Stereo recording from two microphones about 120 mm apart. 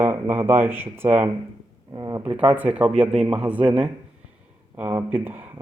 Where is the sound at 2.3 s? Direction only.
10° right (ahead or behind).